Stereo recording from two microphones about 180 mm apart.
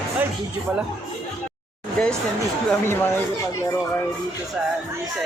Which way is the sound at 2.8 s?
15° left (ahead or behind).